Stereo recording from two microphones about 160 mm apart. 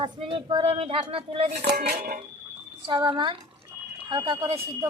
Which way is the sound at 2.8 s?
30° right (ahead or behind).